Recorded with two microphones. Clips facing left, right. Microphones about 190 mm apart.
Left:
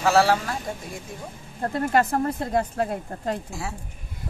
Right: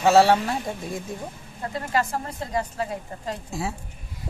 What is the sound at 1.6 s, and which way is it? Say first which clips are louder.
Speech: left 4 dB; 50° left (ahead or behind).